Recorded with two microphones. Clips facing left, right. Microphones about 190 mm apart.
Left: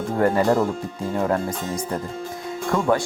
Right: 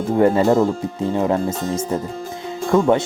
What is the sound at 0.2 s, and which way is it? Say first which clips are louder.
Speech: right 4 dB; 20° right (ahead or behind).